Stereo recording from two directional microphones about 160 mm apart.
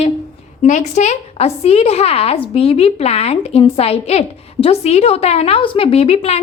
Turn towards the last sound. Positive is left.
turn(degrees=40)  # may be behind; listen again after turning